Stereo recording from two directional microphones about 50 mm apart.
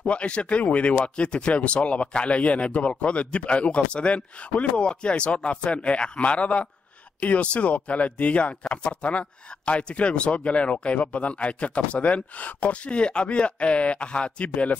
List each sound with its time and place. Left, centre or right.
0.0 s speech: left